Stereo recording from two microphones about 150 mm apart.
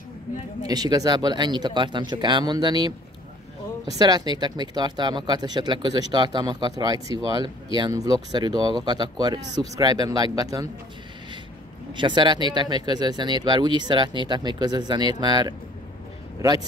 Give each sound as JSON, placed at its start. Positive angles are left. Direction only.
{"t": 0.7, "sound": "speech", "side_deg": -25}
{"t": 4.0, "sound": "speech", "side_deg": -30}
{"t": 11.9, "sound": "speech", "side_deg": -30}